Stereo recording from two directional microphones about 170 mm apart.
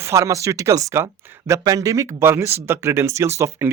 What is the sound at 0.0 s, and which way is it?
Speech, 15° right (ahead or behind).